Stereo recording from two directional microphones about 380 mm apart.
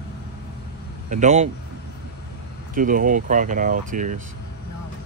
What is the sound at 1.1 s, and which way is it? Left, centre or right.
Speech, centre.